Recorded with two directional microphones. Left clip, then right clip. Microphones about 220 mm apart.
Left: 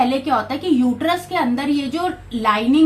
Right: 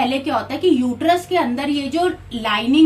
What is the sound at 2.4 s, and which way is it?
Speech, 20° left (ahead or behind).